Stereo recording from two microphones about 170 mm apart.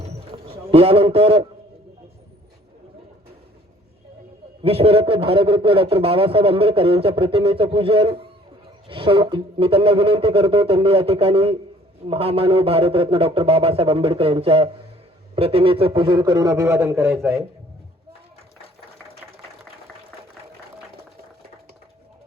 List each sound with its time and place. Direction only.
0.0 s a sound: 35° right (ahead or behind)
0.7 s a man's voice: 35° right (ahead or behind)
4.6 s a man's voice: 35° right (ahead or behind); by 17.1 s 15° right (ahead or behind)